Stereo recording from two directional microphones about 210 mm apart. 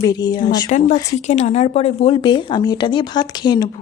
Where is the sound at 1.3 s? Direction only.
35° left (ahead or behind).